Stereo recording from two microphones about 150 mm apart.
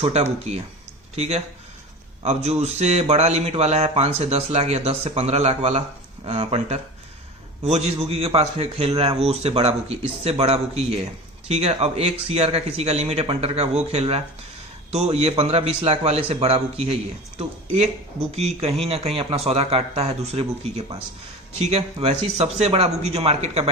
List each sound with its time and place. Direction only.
0.0 s speech: 45° right (ahead or behind)